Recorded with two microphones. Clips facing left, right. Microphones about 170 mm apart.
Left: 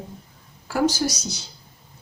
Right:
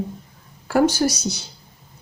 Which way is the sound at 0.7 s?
60° right (ahead or behind).